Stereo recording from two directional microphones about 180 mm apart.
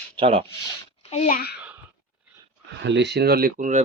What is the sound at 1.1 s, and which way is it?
Speech, 45° left (ahead or behind).